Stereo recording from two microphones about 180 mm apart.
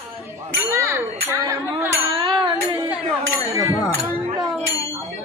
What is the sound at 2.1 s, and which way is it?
Music, 30° right (ahead or behind).